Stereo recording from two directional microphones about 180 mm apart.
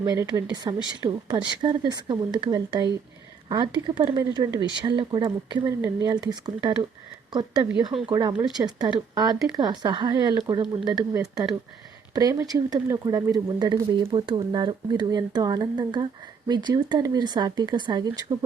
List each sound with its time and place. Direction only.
0.0 s speech: 20° right (ahead or behind)